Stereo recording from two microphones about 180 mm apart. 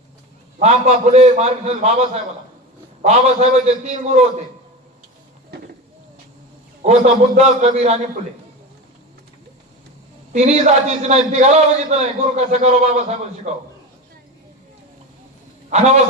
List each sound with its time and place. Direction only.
0.6 s a man's voice: 35° right (ahead or behind)
6.8 s a man's voice: 40° right (ahead or behind)
10.3 s a man's voice: 40° right (ahead or behind)
15.7 s a man's voice: 40° right (ahead or behind)